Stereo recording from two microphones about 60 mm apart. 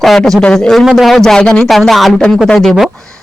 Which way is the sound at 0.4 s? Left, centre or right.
Centre.